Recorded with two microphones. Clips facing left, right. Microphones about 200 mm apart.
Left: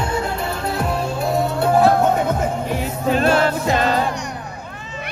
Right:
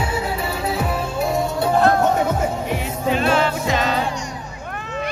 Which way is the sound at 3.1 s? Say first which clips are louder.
Left 2 dB; 40° left (ahead or behind).